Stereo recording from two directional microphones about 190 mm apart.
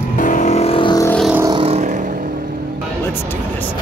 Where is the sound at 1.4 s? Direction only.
30° right (ahead or behind).